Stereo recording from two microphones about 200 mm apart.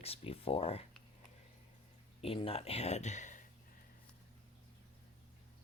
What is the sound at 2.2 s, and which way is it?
Speech, 30° left (ahead or behind).